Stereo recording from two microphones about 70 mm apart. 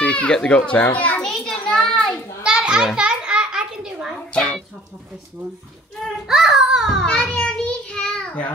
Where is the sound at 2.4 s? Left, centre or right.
Centre.